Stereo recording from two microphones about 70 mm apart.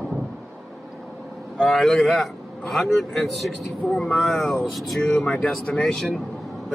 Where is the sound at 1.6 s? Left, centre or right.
Centre.